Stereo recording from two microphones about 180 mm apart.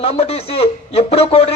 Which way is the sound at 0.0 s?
35° left (ahead or behind).